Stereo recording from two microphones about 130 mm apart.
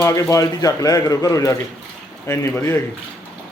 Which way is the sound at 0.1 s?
25° left (ahead or behind).